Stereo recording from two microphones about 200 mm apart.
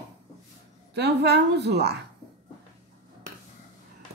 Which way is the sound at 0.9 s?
60° right (ahead or behind).